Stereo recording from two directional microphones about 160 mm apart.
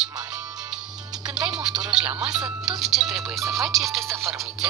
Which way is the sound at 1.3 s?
5° right (ahead or behind).